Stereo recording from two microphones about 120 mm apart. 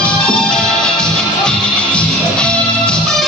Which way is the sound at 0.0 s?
5° left (ahead or behind).